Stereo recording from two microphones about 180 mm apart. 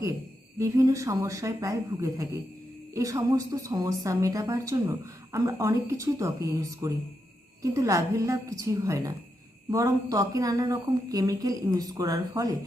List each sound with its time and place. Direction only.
0.6 s a woman's voice: 15° right (ahead or behind)